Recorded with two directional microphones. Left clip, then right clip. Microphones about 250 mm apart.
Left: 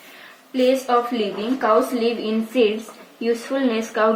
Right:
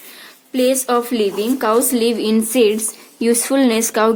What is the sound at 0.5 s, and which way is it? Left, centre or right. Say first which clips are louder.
A woman's voice: right 2 dB; right.